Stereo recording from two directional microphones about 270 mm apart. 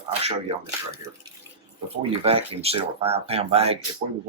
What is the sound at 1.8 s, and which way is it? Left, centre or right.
Speech, right.